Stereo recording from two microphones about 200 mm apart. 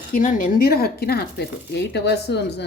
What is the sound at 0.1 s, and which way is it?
Speech, 40° left (ahead or behind).